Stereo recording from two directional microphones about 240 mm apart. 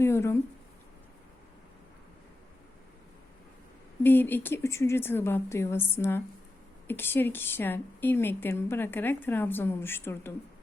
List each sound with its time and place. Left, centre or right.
0.0 s a woman's voice: centre
4.0 s a woman's voice: centre